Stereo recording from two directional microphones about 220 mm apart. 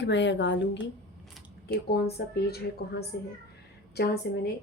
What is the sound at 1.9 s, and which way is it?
A woman's voice, 45° left (ahead or behind).